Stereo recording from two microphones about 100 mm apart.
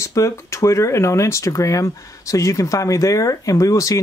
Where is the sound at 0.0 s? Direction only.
30° left (ahead or behind).